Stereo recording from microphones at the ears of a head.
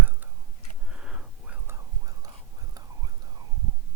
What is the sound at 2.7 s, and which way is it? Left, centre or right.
Whispering, right.